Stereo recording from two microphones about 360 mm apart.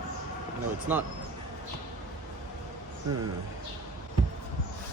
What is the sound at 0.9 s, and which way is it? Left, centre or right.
Speech, centre.